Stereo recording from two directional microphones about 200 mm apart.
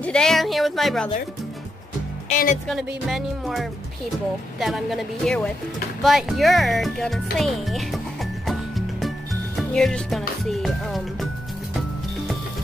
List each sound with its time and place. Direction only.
0.0 s speech: 5° left (ahead or behind)
2.2 s speech: 40° left (ahead or behind)
3.1 s speech: centre (ahead or behind)